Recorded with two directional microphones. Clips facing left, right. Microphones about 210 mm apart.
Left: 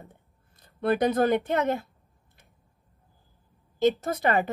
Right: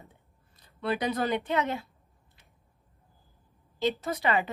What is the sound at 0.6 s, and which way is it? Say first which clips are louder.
Speech: left 6 dB; 50° left (ahead or behind).